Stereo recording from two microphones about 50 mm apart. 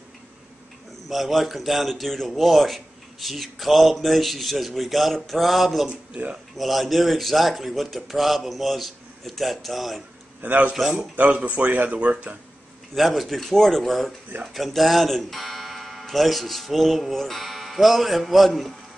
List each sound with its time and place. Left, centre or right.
1.0 s a man's voice: centre
5.9 s speech: right
6.5 s a man's voice: centre
10.4 s speech: right
10.7 s speech: centre
11.1 s speech: right
12.9 s a man's voice: centre